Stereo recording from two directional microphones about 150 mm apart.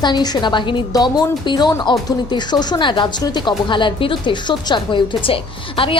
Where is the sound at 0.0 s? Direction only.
30° left (ahead or behind).